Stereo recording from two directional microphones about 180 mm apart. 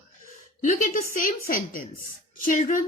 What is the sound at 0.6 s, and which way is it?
A woman's voice, 50° left (ahead or behind).